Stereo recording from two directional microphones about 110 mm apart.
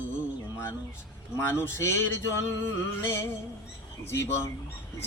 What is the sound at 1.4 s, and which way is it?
Speech, 20° left (ahead or behind).